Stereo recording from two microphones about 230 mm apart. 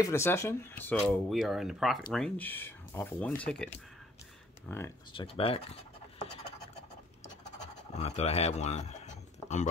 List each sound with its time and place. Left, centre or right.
0.0 s speech: centre
5.1 s speech: left
7.5 s scratch: left